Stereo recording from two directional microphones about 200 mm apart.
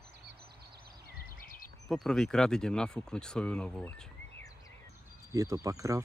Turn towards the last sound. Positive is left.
turn(degrees=-15)  # may be behind; listen again after turning